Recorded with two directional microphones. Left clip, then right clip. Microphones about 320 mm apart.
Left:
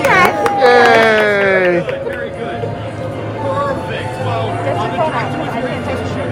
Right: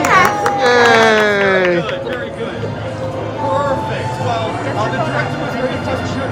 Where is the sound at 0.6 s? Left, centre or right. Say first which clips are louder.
Left 2 dB; centre.